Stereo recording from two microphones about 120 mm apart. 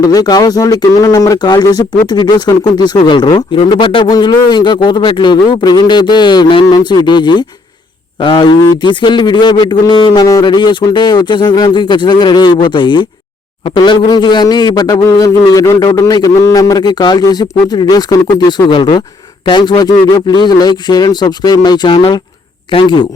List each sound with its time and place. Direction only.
0.1 s speech: 30° left (ahead or behind)